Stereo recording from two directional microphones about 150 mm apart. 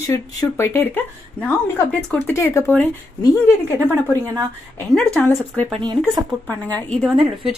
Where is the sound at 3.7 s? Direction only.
20° right (ahead or behind).